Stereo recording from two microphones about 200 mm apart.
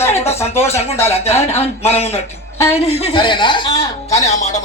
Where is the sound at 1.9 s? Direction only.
30° left (ahead or behind).